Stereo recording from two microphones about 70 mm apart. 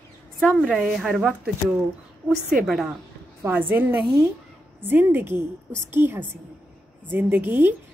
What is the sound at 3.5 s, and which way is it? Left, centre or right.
A woman's voice, right.